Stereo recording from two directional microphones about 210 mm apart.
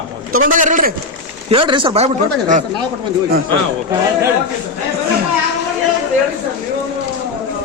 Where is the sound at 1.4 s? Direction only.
25° right (ahead or behind).